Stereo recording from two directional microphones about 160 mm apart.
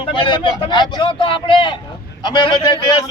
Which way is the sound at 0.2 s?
30° left (ahead or behind).